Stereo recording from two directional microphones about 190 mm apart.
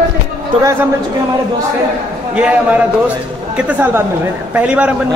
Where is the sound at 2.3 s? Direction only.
5° right (ahead or behind).